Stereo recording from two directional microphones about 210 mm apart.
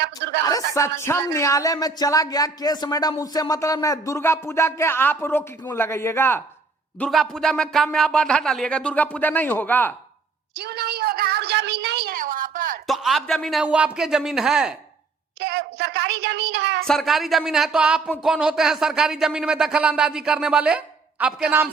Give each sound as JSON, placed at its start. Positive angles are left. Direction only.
{"t": 0.0, "sound": "a sound", "side_deg": -55}
{"t": 0.4, "sound": "speech", "side_deg": 15}
{"t": 10.5, "sound": "a sound", "side_deg": -50}
{"t": 12.9, "sound": "speech", "side_deg": 0}
{"t": 15.4, "sound": "child singing", "side_deg": -50}
{"t": 16.8, "sound": "speech", "side_deg": 0}